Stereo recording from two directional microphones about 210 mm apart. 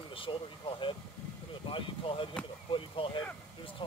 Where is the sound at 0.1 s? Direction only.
25° left (ahead or behind).